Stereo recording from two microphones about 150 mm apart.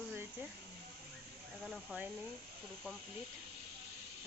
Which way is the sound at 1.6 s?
Centre (ahead or behind).